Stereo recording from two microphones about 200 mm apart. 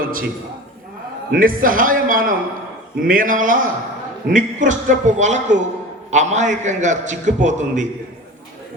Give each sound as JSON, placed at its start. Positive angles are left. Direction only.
{"t": 0.0, "sound": "a man's voice", "side_deg": -45}
{"t": 1.3, "sound": "a man's voice", "side_deg": -45}